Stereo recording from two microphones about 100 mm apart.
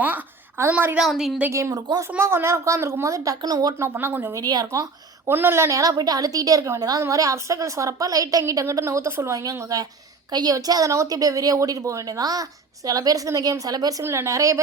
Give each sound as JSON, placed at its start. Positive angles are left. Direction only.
{"t": 0.7, "sound": "a woman's voice", "side_deg": -20}
{"t": 0.9, "sound": "a woman's voice", "side_deg": -5}
{"t": 1.5, "sound": "a woman's voice", "side_deg": -30}
{"t": 3.8, "sound": "a woman's voice", "side_deg": -25}
{"t": 4.4, "sound": "speech", "side_deg": -40}
{"t": 5.3, "sound": "a woman's voice", "side_deg": -25}
{"t": 14.0, "sound": "a woman's voice", "side_deg": -25}